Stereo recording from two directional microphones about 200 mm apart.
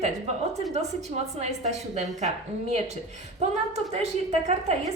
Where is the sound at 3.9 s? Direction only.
35° right (ahead or behind).